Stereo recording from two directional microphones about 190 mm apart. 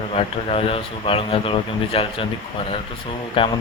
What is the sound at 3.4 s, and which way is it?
Speech, 25° left (ahead or behind).